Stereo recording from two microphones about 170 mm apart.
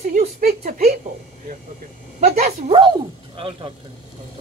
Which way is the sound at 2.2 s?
40° right (ahead or behind).